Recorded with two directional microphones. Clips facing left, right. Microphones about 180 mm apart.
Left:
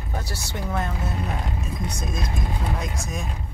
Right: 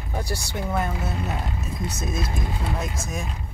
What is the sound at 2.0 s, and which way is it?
Speech, 5° right (ahead or behind).